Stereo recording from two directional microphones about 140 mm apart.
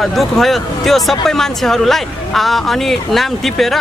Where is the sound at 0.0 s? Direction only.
Centre (ahead or behind).